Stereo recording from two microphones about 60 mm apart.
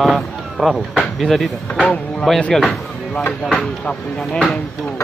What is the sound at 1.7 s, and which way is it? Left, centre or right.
Speech, centre.